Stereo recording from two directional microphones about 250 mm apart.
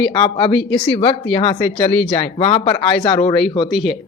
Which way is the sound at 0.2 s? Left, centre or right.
Centre.